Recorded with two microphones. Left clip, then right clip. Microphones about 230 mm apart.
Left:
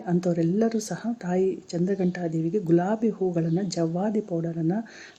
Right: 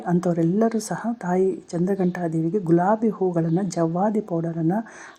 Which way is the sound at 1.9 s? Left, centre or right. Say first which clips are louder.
Right 4 dB; right.